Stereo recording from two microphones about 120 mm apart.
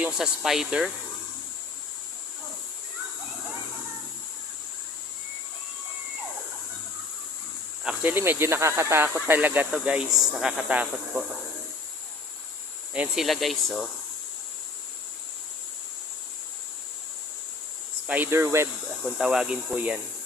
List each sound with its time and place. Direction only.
0.0 s speech: 5° right (ahead or behind)
7.9 s speech: 15° right (ahead or behind)
12.9 s speech: 10° right (ahead or behind)
13.2 s speech: centre (ahead or behind)
18.0 s speech: 15° right (ahead or behind)
19.2 s speech: 5° right (ahead or behind)